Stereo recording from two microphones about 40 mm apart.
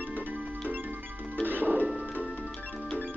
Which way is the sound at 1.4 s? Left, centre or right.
Right.